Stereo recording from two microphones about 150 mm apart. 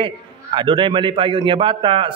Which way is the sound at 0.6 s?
35° right (ahead or behind).